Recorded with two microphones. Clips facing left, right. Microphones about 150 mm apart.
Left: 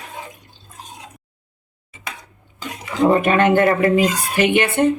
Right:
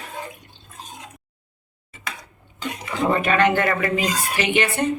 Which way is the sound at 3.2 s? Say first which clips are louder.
Left 4 dB; 45° left (ahead or behind).